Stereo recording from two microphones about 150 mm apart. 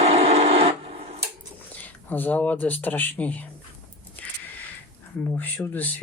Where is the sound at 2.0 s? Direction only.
10° left (ahead or behind).